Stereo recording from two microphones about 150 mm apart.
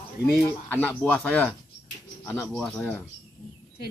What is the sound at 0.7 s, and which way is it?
Speech, 10° left (ahead or behind).